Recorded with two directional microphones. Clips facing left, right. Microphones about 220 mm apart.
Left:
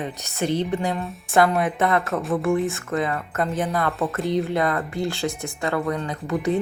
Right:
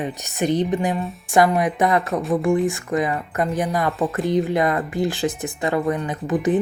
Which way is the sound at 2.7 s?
15° right (ahead or behind).